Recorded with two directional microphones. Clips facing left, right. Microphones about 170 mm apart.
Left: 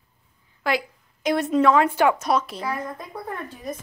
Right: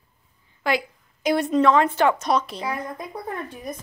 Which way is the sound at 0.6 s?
Centre (ahead or behind).